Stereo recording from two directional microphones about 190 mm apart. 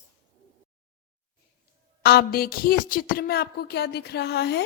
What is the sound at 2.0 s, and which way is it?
A woman's voice, 55° left (ahead or behind).